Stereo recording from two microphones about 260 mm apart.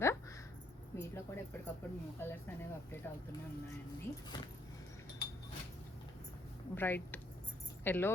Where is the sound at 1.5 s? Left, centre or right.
Centre.